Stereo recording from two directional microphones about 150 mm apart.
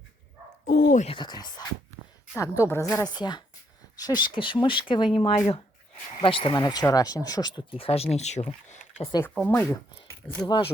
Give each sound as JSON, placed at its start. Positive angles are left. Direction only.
{"t": 0.6, "sound": "a sound", "side_deg": 75}
{"t": 1.0, "sound": "a woman's voice", "side_deg": 30}
{"t": 2.3, "sound": "a woman's voice", "side_deg": 15}
{"t": 9.5, "sound": "speech", "side_deg": 15}
{"t": 10.4, "sound": "speech", "side_deg": 30}